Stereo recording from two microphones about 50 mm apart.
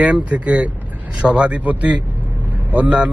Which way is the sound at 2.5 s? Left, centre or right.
Right.